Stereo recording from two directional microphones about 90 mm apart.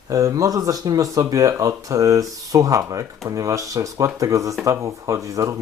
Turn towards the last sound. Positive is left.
turn(degrees=-35)  # may be behind; listen again after turning